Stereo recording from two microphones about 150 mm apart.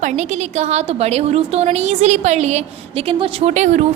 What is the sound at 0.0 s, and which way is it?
A woman's voice, 50° right (ahead or behind).